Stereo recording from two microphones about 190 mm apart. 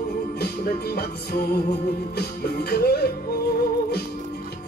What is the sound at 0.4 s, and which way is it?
Music, 55° left (ahead or behind).